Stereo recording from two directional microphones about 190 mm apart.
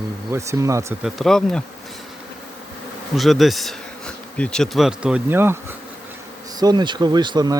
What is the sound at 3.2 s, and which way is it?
Bee, centre (ahead or behind).